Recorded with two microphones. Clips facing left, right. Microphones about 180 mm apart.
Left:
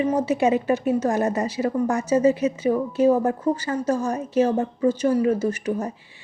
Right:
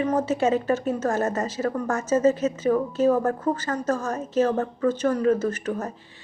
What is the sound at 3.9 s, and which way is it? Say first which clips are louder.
Speech: left 3 dB; 45° right (ahead or behind).